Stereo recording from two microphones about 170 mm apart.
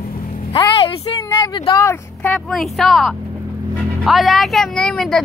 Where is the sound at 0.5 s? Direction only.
30° left (ahead or behind).